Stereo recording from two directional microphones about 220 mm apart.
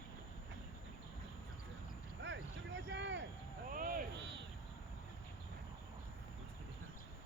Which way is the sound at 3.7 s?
40° right (ahead or behind).